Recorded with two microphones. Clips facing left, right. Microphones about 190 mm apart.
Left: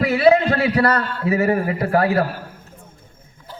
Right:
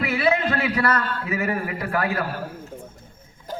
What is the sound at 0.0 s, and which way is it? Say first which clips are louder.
A man's voice: left 7 dB; 35° left (ahead or behind).